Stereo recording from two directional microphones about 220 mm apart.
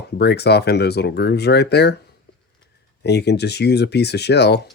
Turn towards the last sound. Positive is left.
turn(degrees=50)  # may be behind; listen again after turning